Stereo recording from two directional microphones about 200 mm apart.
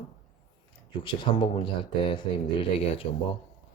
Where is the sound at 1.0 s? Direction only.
25° left (ahead or behind).